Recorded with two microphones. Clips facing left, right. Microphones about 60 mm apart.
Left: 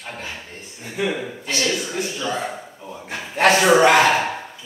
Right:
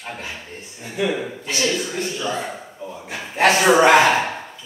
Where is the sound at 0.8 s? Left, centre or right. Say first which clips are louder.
Right 1 dB; centre.